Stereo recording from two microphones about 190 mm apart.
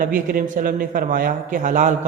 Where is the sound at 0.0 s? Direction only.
45° right (ahead or behind).